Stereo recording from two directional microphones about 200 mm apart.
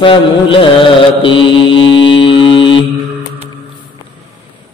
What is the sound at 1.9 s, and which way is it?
Mantra, 25° left (ahead or behind).